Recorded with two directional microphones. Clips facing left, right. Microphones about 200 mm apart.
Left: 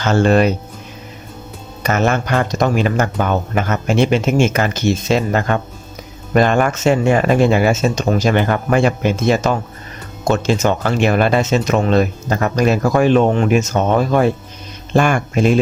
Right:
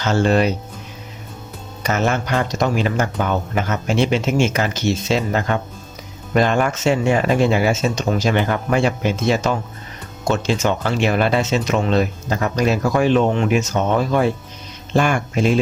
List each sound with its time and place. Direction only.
0.0 s speech: 55° left (ahead or behind)
1.8 s speech: 55° left (ahead or behind)